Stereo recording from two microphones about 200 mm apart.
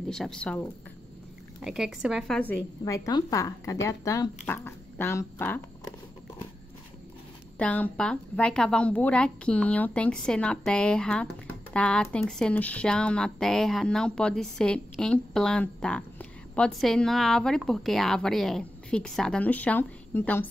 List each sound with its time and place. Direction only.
0.1 s speech: 5° left (ahead or behind)
2.8 s speech: 20° left (ahead or behind)
7.5 s speech: 5° left (ahead or behind)